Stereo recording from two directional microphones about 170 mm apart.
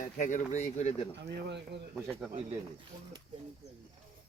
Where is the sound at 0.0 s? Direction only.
45° left (ahead or behind).